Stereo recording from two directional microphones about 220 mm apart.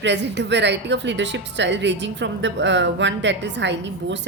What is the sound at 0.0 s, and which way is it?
Speech, 55° right (ahead or behind).